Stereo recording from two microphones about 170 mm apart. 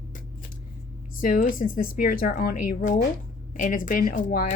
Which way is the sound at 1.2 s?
55° left (ahead or behind).